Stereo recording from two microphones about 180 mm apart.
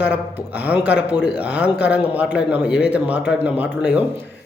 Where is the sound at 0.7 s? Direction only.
10° right (ahead or behind).